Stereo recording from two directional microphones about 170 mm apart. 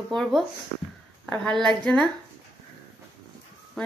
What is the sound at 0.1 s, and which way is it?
A woman's voice, centre (ahead or behind).